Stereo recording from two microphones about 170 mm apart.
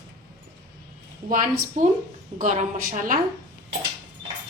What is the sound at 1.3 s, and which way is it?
A woman's voice, 50° right (ahead or behind).